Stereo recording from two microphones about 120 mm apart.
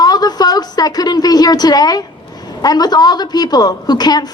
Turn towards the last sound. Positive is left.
turn(degrees=35)  # may be behind; listen again after turning